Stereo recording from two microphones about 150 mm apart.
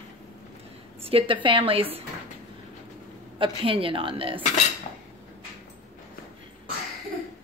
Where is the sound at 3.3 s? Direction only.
35° right (ahead or behind).